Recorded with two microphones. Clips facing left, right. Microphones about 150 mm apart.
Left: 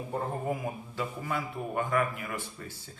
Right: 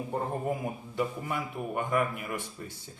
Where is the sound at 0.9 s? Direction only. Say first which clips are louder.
Right 3 dB; 15° right (ahead or behind).